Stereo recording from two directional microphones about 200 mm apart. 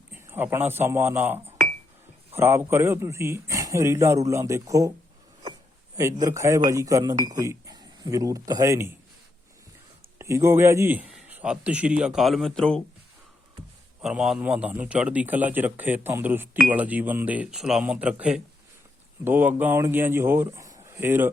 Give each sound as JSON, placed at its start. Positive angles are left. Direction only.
{"t": 0.3, "sound": "a man's voice", "side_deg": -10}
{"t": 6.0, "sound": "a man's voice", "side_deg": -15}
{"t": 10.2, "sound": "a man's voice", "side_deg": -15}
{"t": 14.0, "sound": "a man's voice", "side_deg": 0}